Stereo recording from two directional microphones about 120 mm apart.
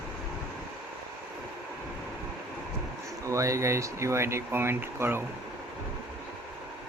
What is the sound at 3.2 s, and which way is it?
Speech, 25° right (ahead or behind).